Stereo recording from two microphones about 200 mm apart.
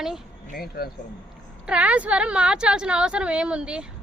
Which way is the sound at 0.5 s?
50° left (ahead or behind).